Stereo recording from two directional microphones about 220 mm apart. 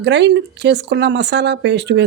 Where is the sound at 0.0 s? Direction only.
50° right (ahead or behind).